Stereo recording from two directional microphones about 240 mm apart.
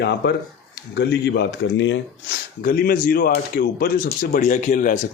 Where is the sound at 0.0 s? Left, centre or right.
Left.